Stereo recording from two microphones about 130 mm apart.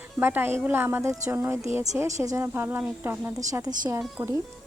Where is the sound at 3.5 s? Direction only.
30° right (ahead or behind).